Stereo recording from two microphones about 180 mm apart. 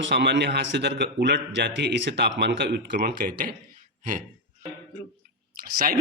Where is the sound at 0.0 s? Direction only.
80° right; by 3.5 s 60° right (ahead or behind).